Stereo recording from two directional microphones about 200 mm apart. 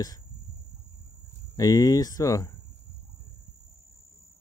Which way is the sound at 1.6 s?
20° left (ahead or behind).